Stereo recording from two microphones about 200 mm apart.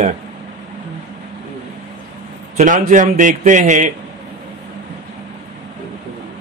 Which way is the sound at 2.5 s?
40° right (ahead or behind).